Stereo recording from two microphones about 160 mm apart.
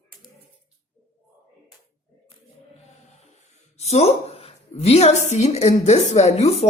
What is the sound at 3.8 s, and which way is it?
A woman's voice, 45° left (ahead or behind).